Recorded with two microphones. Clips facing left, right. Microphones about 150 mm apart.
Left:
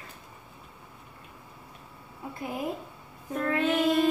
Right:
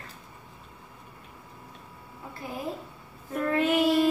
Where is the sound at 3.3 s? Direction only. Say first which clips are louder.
Right 2 dB; 5° right (ahead or behind).